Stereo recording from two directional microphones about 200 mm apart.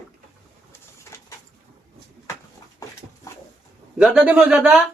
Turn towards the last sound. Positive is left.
turn(degrees=-5)  # may be behind; listen again after turning